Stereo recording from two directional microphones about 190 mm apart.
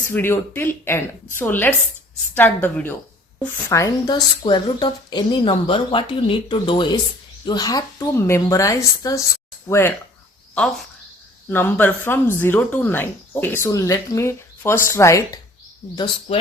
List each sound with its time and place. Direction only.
0.1 s a woman's voice: 10° left (ahead or behind)
16.3 s speech: 35° left (ahead or behind)